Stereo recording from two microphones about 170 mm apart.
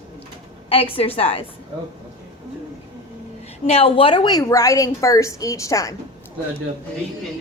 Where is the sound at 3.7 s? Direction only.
35° left (ahead or behind); by 6.0 s 20° left (ahead or behind).